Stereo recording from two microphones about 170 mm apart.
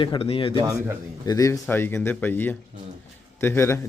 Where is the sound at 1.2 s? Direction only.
20° left (ahead or behind).